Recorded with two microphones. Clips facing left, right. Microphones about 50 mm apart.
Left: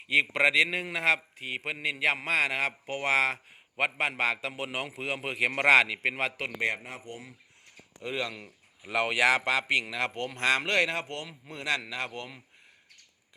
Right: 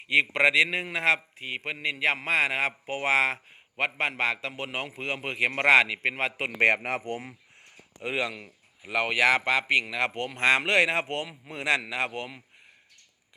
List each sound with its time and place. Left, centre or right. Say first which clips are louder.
0.1 s a man's voice: right 2 dB; centre
6.6 s speech: right 10 dB; right
8.0 s a man's voice: right 4 dB; right
8.4 s a man's voice: right 1 dB; centre